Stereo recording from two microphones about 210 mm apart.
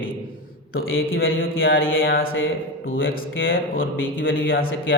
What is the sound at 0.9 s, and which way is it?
Speech, 70° left (ahead or behind).